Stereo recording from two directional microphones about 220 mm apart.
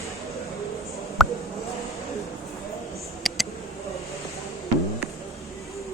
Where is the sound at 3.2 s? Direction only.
Centre (ahead or behind).